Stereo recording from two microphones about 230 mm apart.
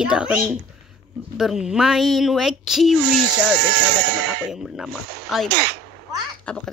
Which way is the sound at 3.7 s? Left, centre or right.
Right.